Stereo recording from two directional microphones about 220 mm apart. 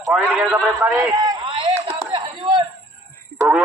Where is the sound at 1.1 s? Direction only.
15° right (ahead or behind).